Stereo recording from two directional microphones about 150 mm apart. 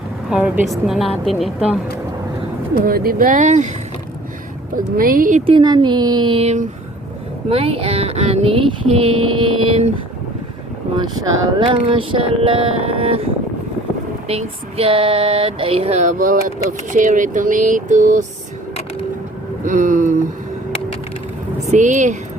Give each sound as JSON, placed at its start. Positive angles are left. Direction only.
{"t": 0.3, "sound": "a woman's voice", "side_deg": -5}
{"t": 2.7, "sound": "speech", "side_deg": -85}
{"t": 4.9, "sound": "speech", "side_deg": -70}
{"t": 5.5, "sound": "speech", "side_deg": -30}
{"t": 10.9, "sound": "speech", "side_deg": -25}
{"t": 14.3, "sound": "female singing", "side_deg": -40}
{"t": 19.6, "sound": "female singing", "side_deg": -60}
{"t": 21.7, "sound": "a woman's voice", "side_deg": -55}